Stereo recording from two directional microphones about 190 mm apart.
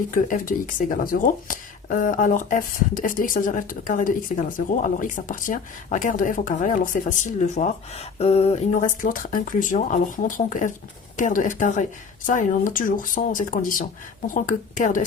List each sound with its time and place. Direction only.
0.1 s speech: 45° left (ahead or behind)
9.0 s speech: 45° left (ahead or behind)